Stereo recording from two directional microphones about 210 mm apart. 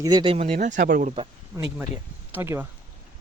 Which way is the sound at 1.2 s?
15° right (ahead or behind).